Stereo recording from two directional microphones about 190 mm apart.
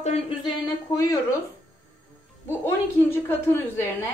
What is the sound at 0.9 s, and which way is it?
Speech, 20° left (ahead or behind).